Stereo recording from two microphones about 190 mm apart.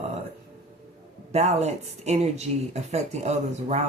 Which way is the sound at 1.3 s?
35° right (ahead or behind).